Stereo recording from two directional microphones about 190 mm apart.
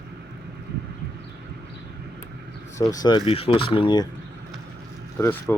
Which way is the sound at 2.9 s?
20° left (ahead or behind).